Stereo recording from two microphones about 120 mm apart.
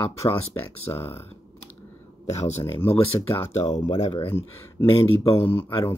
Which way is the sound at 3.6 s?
55° left (ahead or behind).